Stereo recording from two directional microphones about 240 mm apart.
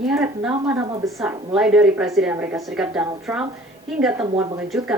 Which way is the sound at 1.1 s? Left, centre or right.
Centre.